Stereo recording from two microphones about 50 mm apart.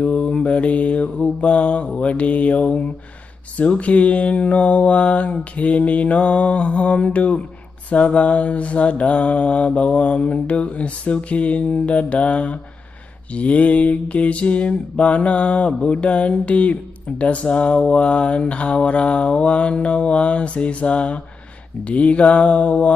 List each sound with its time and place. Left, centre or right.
0.0 s mantra: left